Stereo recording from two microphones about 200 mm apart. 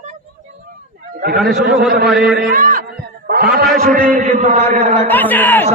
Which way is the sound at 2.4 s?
45° right (ahead or behind).